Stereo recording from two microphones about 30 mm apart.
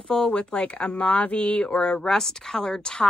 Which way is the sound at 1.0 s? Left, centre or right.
Left.